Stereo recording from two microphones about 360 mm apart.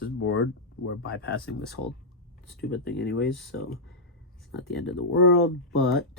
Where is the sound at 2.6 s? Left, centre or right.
Left.